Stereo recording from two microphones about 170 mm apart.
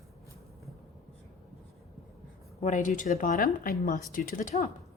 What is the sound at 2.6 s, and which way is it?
A woman's voice, 45° left (ahead or behind).